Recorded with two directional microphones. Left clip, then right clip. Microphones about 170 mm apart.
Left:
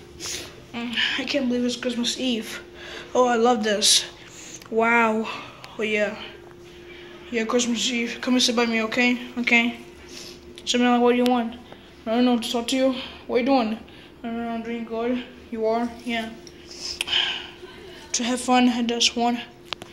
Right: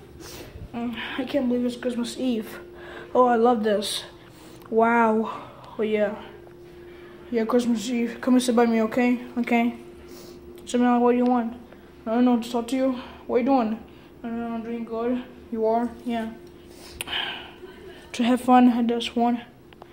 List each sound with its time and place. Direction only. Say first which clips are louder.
0.7 s speech: left 6 dB; 20° right (ahead or behind)
7.5 s a woman's voice: left 3 dB; 30° right (ahead or behind)
10.6 s a sound: left 2 dB; 15° right (ahead or behind)
10.9 s speech: left 1 dB; 5° right (ahead or behind)
14.2 s speech: left 2 dB; centre (ahead or behind)
16.8 s a sound: left 6 dB; 30° right (ahead or behind)
18.1 s a woman's voice: right 2 dB; 45° right (ahead or behind); by 19.4 s 25° right (ahead or behind)